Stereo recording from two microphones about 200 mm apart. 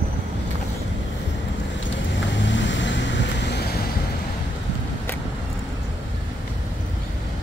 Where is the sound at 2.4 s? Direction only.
65° left (ahead or behind).